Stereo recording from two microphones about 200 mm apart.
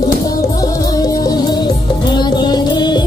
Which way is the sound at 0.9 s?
20° left (ahead or behind).